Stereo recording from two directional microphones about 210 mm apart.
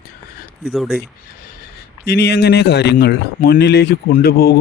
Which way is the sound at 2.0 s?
50° left (ahead or behind).